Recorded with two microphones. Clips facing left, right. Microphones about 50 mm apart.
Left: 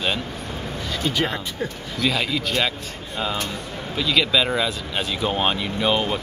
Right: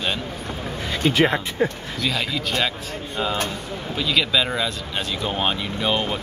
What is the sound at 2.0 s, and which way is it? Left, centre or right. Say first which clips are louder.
Speech: left 2 dB; centre.